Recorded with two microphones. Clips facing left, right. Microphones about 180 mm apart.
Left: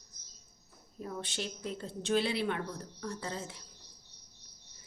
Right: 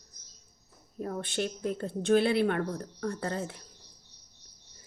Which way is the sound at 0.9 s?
55° right (ahead or behind).